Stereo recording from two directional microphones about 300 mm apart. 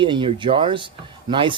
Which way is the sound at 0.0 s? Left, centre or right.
Centre.